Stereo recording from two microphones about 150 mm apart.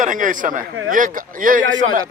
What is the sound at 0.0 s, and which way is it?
A man's voice, 60° right (ahead or behind).